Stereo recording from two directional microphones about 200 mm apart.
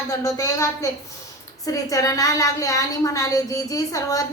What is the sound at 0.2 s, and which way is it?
A woman's voice, 15° left (ahead or behind).